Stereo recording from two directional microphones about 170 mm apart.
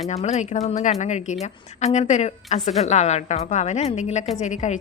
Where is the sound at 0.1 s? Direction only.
40° left (ahead or behind).